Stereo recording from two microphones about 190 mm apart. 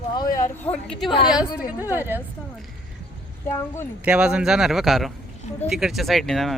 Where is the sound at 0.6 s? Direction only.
5° left (ahead or behind).